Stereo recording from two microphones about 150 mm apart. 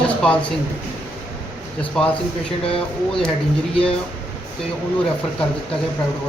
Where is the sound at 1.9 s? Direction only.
5° left (ahead or behind).